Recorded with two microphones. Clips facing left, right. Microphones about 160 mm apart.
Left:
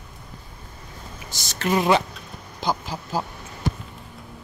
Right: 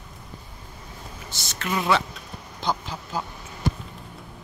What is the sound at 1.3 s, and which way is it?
Speech, 40° left (ahead or behind).